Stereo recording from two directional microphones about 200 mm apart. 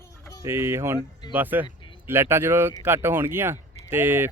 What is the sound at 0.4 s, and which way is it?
Speech, 15° right (ahead or behind).